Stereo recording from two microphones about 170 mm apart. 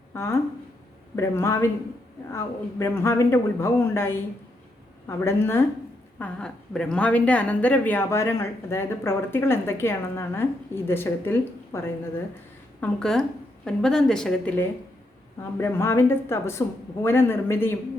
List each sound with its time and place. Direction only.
0.1 s a woman's voice: 15° left (ahead or behind)
12.8 s a woman's voice: 5° left (ahead or behind)